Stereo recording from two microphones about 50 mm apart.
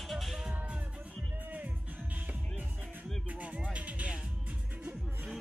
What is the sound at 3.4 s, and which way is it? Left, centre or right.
Music, right.